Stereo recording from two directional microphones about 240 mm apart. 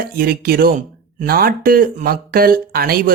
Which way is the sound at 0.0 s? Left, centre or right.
Right.